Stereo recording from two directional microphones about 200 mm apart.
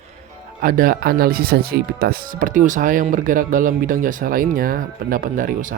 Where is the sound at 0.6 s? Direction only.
45° right (ahead or behind).